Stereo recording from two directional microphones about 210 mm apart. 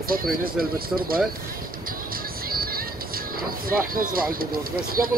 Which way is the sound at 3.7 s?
45° right (ahead or behind).